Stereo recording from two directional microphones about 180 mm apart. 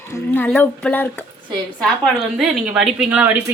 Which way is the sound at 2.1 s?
5° right (ahead or behind).